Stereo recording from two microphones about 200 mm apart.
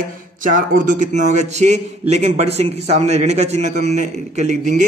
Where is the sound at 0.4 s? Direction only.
40° right (ahead or behind).